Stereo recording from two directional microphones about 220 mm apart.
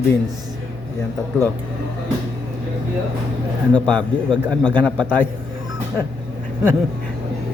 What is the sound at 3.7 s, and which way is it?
A man's voice, 5° left (ahead or behind).